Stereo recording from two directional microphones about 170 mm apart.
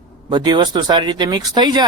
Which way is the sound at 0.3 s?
25° right (ahead or behind).